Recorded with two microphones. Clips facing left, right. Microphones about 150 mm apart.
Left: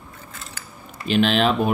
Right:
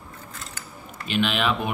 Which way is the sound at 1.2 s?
35° left (ahead or behind).